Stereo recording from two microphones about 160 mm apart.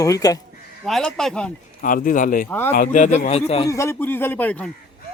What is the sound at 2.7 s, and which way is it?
Speech, 60° left (ahead or behind).